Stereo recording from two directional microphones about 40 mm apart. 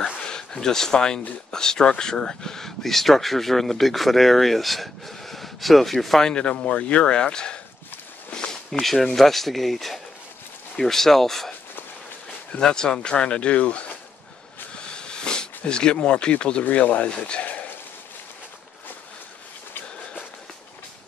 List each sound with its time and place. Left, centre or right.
0.2 s speech: centre
6.2 s speech: left
8.3 s a sound: left
8.8 s speech: centre
12.5 s speech: centre
13.2 s speech: left
14.8 s a sound: left
16.6 s speech: left